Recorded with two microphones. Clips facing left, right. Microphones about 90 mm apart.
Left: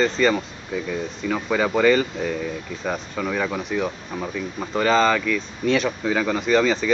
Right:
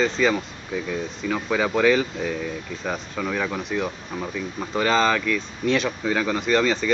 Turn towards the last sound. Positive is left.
turn(degrees=0)  # may be behind; listen again after turning